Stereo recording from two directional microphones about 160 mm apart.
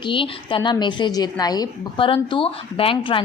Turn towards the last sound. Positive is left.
turn(degrees=35)  # may be behind; listen again after turning